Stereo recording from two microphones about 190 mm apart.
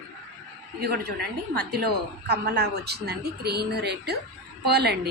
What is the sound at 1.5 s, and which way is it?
A woman's voice, 55° right (ahead or behind).